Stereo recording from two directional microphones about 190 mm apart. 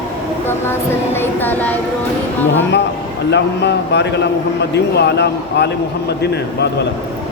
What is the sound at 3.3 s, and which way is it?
A man's voice, 65° left (ahead or behind).